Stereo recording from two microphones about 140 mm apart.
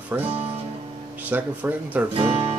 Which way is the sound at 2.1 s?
40° right (ahead or behind).